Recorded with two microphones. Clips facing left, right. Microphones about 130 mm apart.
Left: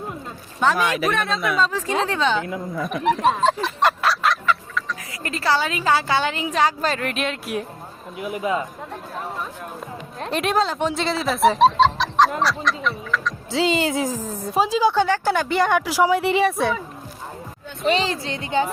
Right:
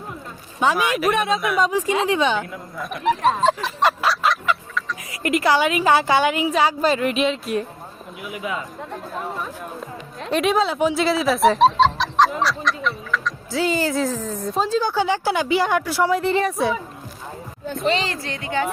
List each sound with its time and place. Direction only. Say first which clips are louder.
0.6 s a woman's voice: right 1 dB; 10° right (ahead or behind)
2.9 s fowl: even; centre (ahead or behind)
5.2 s a woman's voice: right 4 dB; 15° right (ahead or behind); by 7.5 s centre (ahead or behind)
8.2 s speech: left 5 dB; 40° left (ahead or behind)
10.2 s fowl: right 2 dB; centre (ahead or behind)
13.5 s speech: left 1 dB; 25° left (ahead or behind); by 14.9 s 5° left (ahead or behind)
14.9 s a woman's voice: left 1 dB; 10° right (ahead or behind)
15.8 s speech: left 1 dB; 10° left (ahead or behind)
17.8 s speech: left 2 dB; 15° left (ahead or behind)
18.3 s speech: left 2 dB; 30° left (ahead or behind)